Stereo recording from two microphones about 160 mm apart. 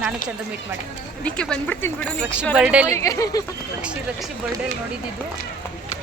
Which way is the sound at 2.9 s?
20° left (ahead or behind).